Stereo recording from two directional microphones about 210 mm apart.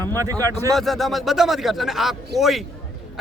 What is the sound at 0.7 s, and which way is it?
A man's voice, centre (ahead or behind).